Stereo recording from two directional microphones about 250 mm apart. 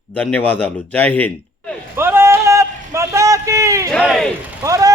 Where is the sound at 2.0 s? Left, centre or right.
Centre.